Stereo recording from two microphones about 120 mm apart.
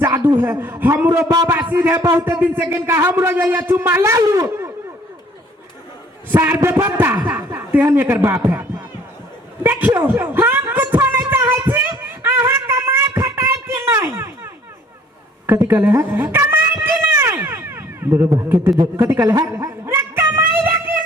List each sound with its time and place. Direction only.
0.2 s a man's voice: 15° right (ahead or behind)
6.3 s a man's voice: 20° right (ahead or behind)
9.6 s a man's voice: 15° right (ahead or behind)
10.7 s a sound: 15° right (ahead or behind)